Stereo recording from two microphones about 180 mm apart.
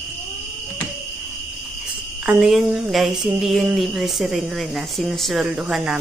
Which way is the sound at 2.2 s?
5° right (ahead or behind).